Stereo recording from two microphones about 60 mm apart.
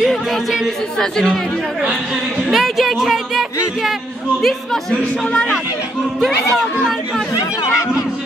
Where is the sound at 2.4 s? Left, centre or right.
Centre.